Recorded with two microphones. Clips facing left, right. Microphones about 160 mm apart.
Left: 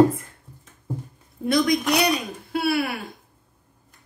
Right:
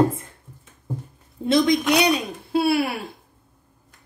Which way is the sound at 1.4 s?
25° right (ahead or behind).